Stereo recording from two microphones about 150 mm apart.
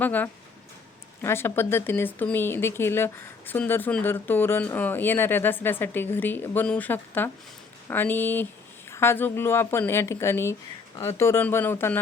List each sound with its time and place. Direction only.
0.0 s speech: 10° left (ahead or behind)